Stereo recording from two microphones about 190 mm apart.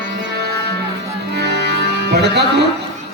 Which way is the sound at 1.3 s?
60° right (ahead or behind).